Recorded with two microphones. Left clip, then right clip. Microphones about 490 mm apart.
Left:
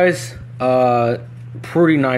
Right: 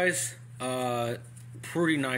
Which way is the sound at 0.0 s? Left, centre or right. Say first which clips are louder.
Left 12 dB; right.